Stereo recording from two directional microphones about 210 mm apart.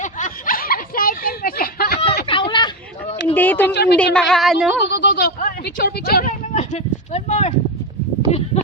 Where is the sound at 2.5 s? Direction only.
20° left (ahead or behind).